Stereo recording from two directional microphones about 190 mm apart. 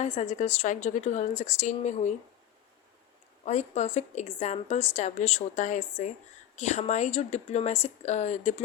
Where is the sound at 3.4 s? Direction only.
35° left (ahead or behind).